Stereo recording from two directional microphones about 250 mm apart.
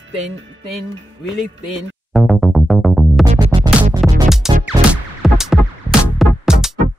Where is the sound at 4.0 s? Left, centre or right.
Centre.